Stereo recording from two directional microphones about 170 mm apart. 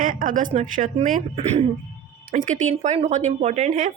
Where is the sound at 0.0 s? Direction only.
55° right (ahead or behind).